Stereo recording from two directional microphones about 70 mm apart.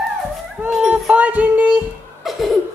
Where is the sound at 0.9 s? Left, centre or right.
Centre.